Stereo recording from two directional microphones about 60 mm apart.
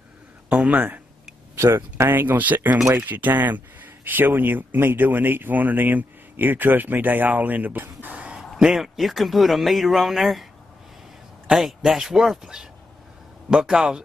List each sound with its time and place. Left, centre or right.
0.5 s speech: right
1.5 s speech: right
8.4 s a man's voice: centre
11.4 s a man's voice: centre